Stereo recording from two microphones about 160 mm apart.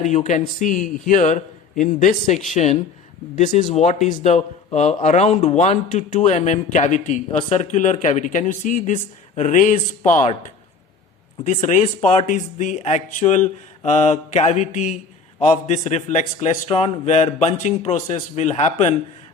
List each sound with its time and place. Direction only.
0.3 s a man's voice: 50° left (ahead or behind)
12.0 s a man's voice: 50° left (ahead or behind)